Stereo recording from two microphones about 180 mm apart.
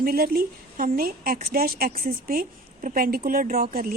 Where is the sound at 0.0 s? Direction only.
55° right (ahead or behind).